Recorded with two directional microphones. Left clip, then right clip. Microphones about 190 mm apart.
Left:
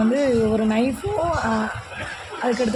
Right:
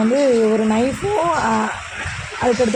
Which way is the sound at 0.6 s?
15° right (ahead or behind).